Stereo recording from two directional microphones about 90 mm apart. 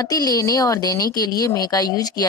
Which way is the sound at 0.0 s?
45° left (ahead or behind).